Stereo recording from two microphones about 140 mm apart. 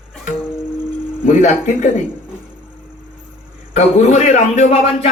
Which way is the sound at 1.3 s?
70° left (ahead or behind).